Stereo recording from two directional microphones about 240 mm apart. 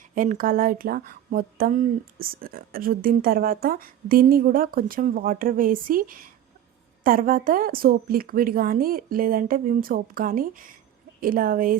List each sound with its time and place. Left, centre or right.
0.1 s speech: right